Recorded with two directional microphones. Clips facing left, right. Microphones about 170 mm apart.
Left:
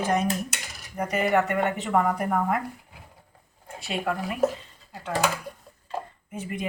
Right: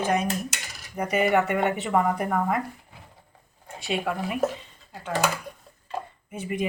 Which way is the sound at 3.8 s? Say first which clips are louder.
Right 1 dB; centre (ahead or behind).